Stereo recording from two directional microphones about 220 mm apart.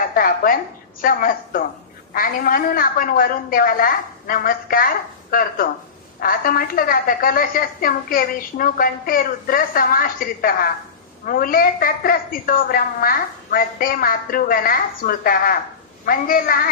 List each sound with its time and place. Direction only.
0.1 s a woman's voice: 40° left (ahead or behind)